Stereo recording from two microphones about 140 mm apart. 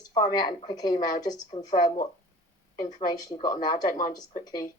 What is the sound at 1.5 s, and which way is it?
Speech, 55° left (ahead or behind).